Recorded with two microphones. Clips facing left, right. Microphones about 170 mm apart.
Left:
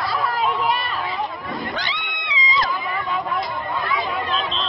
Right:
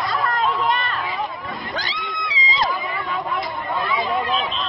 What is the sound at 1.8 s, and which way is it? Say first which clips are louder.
Cat: right 2 dB; 35° right (ahead or behind).